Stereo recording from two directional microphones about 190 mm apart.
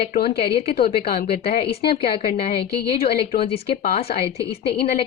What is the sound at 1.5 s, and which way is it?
A woman's voice, 30° left (ahead or behind).